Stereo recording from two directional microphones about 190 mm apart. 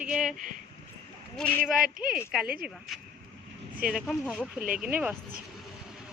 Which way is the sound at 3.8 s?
Centre (ahead or behind).